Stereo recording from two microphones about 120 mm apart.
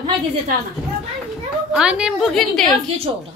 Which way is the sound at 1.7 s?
5° right (ahead or behind).